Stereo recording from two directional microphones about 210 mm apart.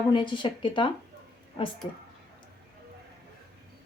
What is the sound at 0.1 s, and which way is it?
Speech, 20° left (ahead or behind).